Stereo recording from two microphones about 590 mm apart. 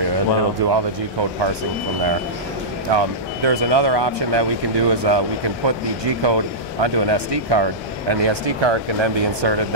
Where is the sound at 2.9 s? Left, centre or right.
Right.